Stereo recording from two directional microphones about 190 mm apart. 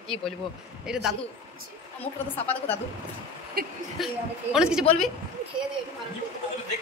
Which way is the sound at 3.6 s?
50° right (ahead or behind).